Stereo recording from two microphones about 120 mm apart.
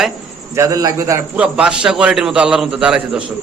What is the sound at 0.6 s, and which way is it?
Speech, 30° right (ahead or behind).